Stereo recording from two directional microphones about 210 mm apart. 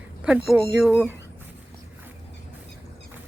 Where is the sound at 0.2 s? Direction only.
5° right (ahead or behind).